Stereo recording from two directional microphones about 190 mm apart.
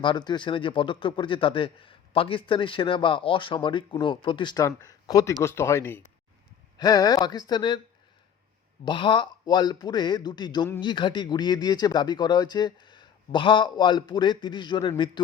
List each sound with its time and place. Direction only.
0.0 s a man's voice: 25° left (ahead or behind)
8.8 s a man's voice: 25° left (ahead or behind)